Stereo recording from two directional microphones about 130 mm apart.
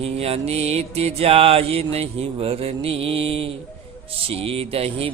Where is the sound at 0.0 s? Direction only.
50° right (ahead or behind).